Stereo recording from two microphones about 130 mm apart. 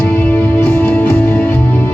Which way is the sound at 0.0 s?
10° left (ahead or behind).